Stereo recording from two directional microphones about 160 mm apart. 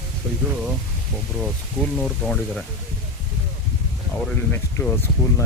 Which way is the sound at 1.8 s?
5° left (ahead or behind).